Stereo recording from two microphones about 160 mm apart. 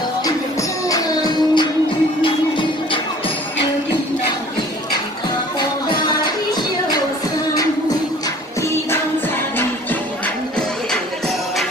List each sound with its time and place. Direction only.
0.2 s music: 20° left (ahead or behind)
6.0 s music: 25° left (ahead or behind)